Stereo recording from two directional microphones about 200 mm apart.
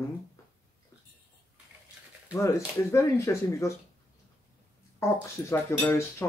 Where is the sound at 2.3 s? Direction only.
15° left (ahead or behind).